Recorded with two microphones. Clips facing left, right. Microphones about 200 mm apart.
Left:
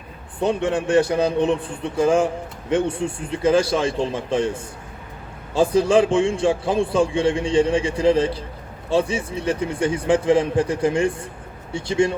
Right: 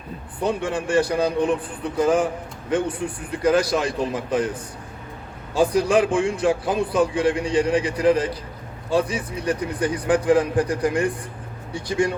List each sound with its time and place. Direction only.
0.3 s a man's voice: 25° left (ahead or behind)